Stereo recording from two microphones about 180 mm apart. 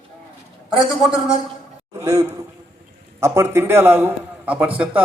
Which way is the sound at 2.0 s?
20° right (ahead or behind).